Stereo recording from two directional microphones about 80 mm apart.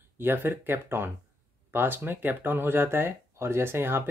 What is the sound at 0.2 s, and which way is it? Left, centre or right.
Speech, right.